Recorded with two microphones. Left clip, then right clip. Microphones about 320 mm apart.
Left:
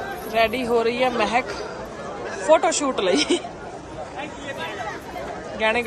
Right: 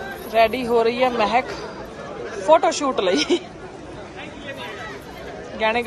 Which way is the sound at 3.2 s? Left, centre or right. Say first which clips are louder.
Right 1 dB; centre.